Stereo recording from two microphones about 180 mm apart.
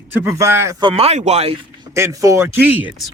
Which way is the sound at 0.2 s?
15° right (ahead or behind).